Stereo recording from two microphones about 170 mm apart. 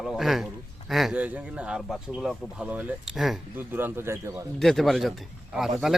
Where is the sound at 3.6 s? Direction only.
10° right (ahead or behind).